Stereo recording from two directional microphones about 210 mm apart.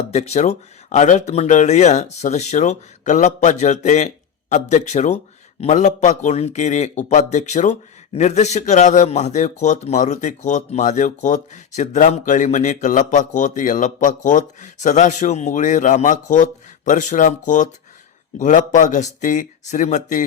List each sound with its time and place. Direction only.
0.1 s speech: 30° left (ahead or behind)